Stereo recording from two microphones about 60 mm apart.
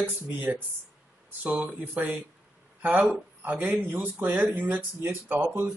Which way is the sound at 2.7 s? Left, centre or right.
Right.